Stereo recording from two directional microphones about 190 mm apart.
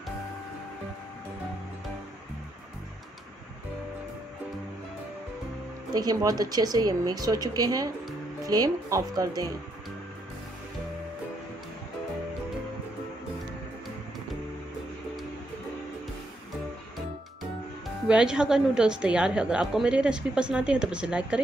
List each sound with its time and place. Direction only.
5.9 s speech: 20° right (ahead or behind)
18.0 s a woman's voice: 5° right (ahead or behind)